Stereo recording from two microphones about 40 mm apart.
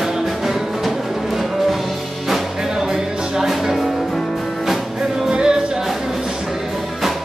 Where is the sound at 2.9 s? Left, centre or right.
Centre.